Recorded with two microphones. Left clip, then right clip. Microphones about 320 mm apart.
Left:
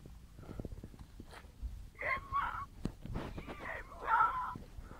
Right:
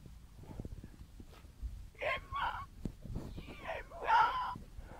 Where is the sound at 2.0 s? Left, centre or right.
Right.